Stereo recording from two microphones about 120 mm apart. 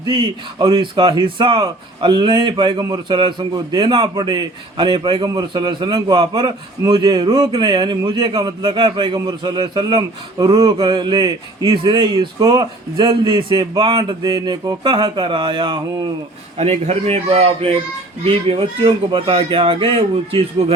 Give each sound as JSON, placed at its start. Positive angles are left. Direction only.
{"t": 0.0, "sound": "speech", "side_deg": -40}
{"t": 16.6, "sound": "a man's voice", "side_deg": -60}